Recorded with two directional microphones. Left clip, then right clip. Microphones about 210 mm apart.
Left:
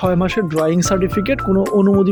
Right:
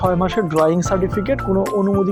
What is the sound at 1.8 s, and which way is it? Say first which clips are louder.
Music: left 3 dB; 45° left (ahead or behind).